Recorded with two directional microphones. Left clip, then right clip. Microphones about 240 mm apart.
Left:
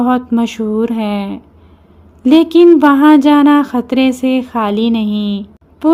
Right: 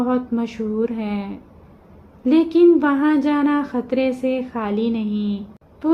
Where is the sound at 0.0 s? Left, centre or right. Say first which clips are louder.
Left 8 dB; left.